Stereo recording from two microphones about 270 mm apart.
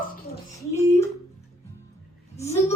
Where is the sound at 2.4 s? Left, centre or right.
Centre.